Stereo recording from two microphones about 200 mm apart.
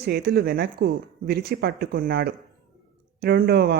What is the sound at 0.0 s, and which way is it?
Speech, 50° right (ahead or behind).